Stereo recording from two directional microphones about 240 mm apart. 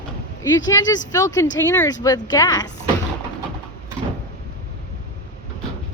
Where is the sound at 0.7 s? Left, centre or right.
Centre.